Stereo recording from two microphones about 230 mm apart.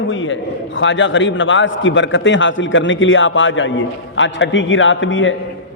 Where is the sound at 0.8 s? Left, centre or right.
Left.